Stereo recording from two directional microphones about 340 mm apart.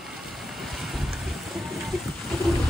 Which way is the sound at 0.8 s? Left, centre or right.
Centre.